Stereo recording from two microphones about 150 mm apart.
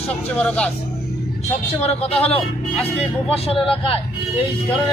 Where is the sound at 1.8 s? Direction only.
45° left (ahead or behind).